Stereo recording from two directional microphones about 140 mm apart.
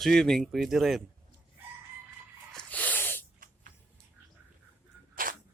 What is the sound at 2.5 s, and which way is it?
Snort, 10° left (ahead or behind).